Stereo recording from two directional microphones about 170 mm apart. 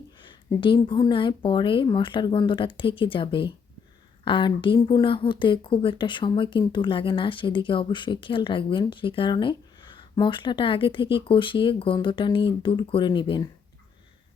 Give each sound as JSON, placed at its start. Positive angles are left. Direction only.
{"t": 0.2, "sound": "speech", "side_deg": 30}